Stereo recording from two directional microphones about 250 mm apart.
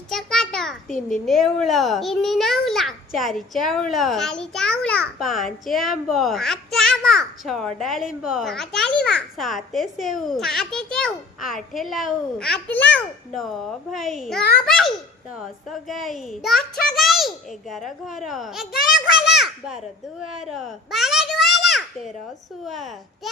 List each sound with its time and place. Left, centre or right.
0.1 s a sound: centre
1.1 s a child's voice: centre
18.7 s a child's voice: left
19.2 s a child's voice: centre